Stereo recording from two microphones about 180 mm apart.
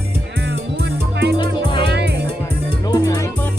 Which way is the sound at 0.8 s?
70° right (ahead or behind).